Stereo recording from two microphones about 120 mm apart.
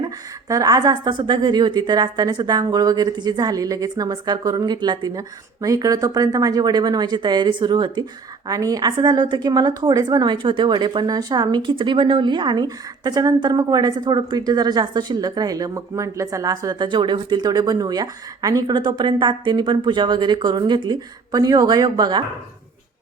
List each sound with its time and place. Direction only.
0.0 s a woman's voice: 30° right (ahead or behind)